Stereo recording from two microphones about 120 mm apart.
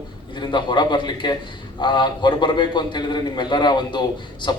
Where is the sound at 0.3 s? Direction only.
40° left (ahead or behind).